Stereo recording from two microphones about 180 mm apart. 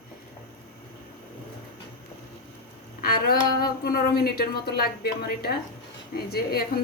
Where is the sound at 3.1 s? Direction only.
55° left (ahead or behind).